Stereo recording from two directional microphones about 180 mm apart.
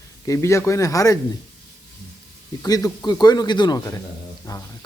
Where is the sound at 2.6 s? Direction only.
20° left (ahead or behind).